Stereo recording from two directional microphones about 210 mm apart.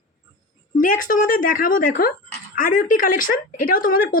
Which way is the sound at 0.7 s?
40° left (ahead or behind).